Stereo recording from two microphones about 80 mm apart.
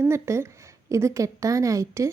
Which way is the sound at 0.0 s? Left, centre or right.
Right.